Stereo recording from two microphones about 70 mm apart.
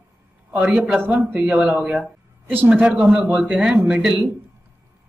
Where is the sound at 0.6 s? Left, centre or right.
Centre.